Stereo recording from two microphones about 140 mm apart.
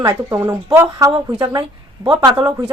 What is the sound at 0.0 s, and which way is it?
Speech, 15° right (ahead or behind).